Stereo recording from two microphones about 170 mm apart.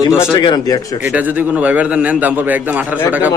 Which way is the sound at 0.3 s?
25° left (ahead or behind).